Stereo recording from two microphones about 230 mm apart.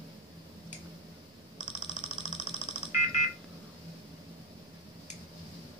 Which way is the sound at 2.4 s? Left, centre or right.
Left.